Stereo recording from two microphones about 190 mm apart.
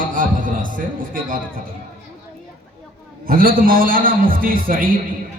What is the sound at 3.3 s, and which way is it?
A man's voice, 50° right (ahead or behind).